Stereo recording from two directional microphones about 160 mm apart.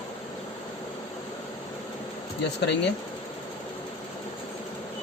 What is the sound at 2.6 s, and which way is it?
Speech, 90° left.